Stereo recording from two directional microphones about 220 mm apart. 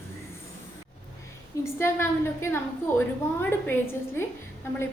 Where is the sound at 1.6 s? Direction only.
10° left (ahead or behind).